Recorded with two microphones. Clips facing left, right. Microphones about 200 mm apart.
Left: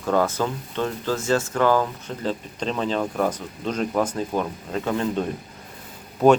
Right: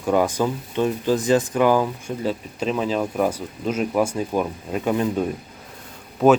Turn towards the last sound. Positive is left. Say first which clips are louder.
# even
turn(degrees=0)  # may be behind; listen again after turning